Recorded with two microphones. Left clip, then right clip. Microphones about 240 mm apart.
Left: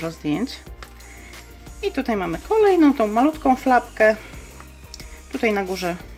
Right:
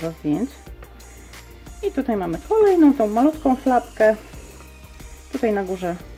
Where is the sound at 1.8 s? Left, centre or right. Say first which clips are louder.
Even; left.